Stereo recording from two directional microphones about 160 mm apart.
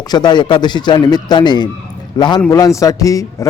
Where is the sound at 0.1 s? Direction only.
25° left (ahead or behind).